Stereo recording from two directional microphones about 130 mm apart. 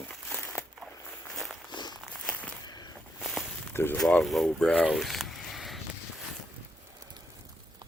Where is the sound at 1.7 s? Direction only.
35° left (ahead or behind).